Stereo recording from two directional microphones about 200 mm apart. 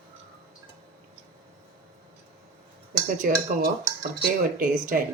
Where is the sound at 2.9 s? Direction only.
40° right (ahead or behind).